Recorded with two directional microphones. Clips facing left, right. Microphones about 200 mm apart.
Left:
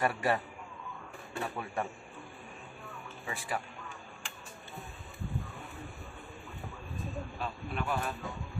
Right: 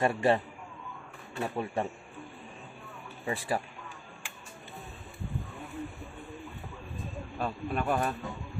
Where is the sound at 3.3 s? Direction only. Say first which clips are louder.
Right 6 dB; 35° right (ahead or behind).